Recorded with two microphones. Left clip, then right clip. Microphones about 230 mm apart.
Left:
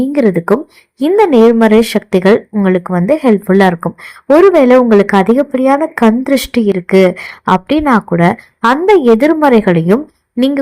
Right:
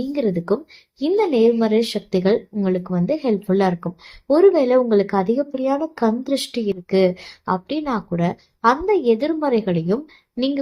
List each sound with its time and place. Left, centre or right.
0.1 s speech: left